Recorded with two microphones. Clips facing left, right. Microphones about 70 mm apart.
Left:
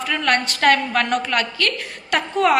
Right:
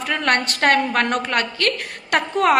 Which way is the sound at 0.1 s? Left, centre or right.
Right.